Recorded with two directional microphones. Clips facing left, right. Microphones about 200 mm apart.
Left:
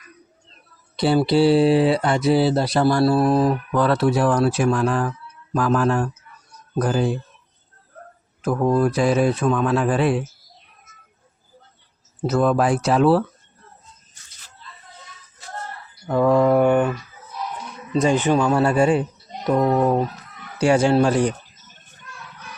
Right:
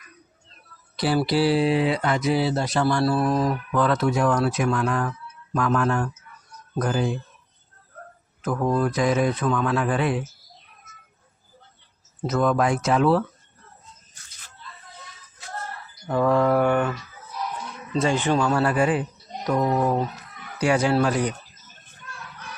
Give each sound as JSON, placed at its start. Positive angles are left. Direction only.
{"t": 0.9, "sound": "speech", "side_deg": 25}
{"t": 8.4, "sound": "speech", "side_deg": 30}
{"t": 12.2, "sound": "speech", "side_deg": 30}
{"t": 16.1, "sound": "mantra", "side_deg": 15}
{"t": 18.6, "sound": "speech", "side_deg": 25}